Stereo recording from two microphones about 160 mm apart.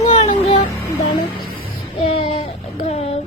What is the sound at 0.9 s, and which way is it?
Music, 25° left (ahead or behind).